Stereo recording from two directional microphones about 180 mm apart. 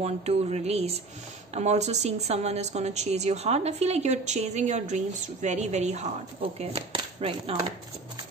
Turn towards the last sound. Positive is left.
turn(degrees=-35)  # may be behind; listen again after turning